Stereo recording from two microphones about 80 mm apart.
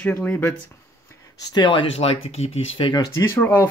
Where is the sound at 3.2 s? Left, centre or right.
Left.